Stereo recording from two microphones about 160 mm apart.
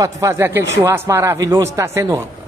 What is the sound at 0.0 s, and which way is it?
Speech, 20° right (ahead or behind).